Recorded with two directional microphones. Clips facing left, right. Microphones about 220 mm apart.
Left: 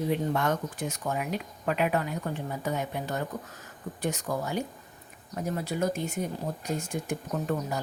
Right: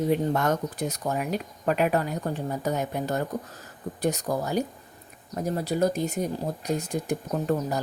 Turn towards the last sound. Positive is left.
turn(degrees=-35)  # may be behind; listen again after turning